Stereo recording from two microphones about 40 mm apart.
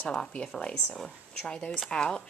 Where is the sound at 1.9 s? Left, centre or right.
Left.